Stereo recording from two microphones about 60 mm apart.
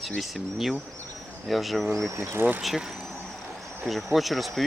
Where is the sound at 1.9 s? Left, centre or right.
Right.